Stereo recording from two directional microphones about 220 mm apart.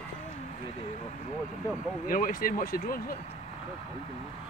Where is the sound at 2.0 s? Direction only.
40° left (ahead or behind).